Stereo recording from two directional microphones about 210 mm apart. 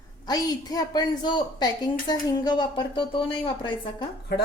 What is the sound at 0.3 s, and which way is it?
A woman's voice, 15° left (ahead or behind).